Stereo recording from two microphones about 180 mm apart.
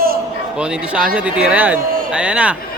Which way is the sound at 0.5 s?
5° right (ahead or behind).